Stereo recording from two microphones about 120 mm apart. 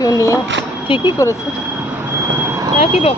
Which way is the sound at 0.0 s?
25° left (ahead or behind).